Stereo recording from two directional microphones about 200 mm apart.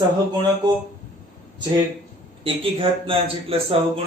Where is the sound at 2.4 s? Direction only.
25° right (ahead or behind).